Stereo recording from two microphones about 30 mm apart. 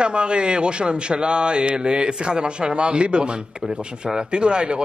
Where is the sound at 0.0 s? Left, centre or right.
Right.